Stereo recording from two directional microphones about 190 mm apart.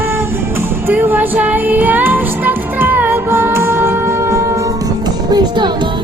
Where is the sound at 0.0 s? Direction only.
10° right (ahead or behind).